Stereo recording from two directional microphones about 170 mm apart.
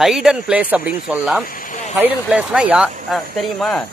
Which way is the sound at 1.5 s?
50° left (ahead or behind).